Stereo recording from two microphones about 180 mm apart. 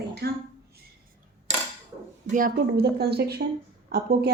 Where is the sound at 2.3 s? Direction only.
55° right (ahead or behind).